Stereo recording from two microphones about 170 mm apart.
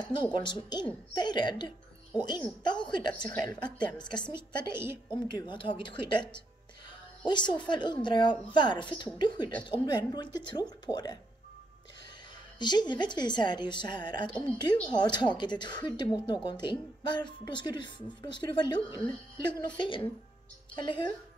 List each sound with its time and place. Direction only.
0.0 s a woman's voice: 25° left (ahead or behind)
12.5 s a woman's voice: 25° left (ahead or behind)